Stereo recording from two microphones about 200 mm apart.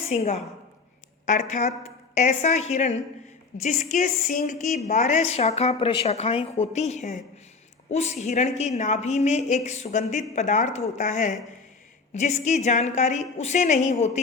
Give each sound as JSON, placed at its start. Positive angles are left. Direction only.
{"t": 0.1, "sound": "a woman's voice", "side_deg": 30}